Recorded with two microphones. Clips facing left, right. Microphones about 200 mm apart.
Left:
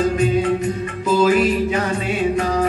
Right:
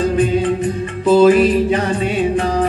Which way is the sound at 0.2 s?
30° right (ahead or behind).